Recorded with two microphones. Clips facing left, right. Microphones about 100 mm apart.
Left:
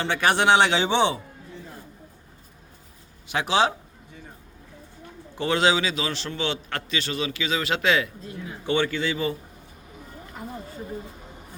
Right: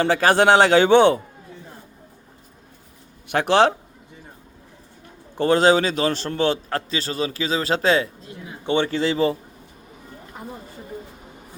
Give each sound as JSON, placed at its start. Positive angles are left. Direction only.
{"t": 0.0, "sound": "a man's voice", "side_deg": -40}
{"t": 3.2, "sound": "speech", "side_deg": -55}
{"t": 5.4, "sound": "a man's voice", "side_deg": -40}